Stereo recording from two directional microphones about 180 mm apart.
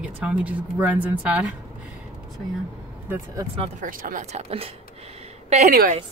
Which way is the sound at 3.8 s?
50° right (ahead or behind).